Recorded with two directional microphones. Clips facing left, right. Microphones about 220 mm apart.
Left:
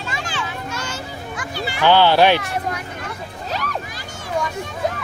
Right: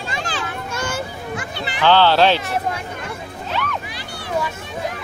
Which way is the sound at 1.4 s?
25° right (ahead or behind).